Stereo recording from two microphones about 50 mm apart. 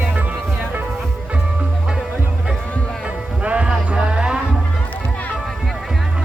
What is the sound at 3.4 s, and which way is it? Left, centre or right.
Music, right.